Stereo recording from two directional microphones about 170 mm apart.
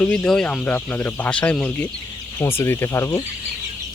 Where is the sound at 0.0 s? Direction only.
5° left (ahead or behind).